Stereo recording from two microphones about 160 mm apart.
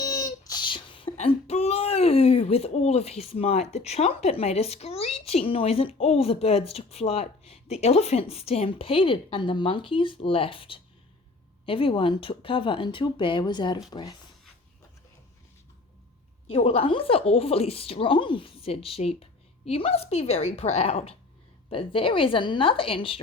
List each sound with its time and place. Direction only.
0.0 s a sound: 20° left (ahead or behind)
1.1 s speech: 40° left (ahead or behind)
16.5 s speech: 35° left (ahead or behind)